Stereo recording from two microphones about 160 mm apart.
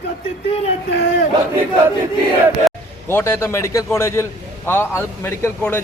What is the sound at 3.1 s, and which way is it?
A man's voice, 15° left (ahead or behind).